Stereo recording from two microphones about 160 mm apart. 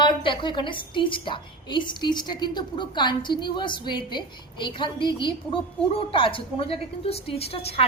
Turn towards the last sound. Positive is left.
turn(degrees=40)  # may be behind; listen again after turning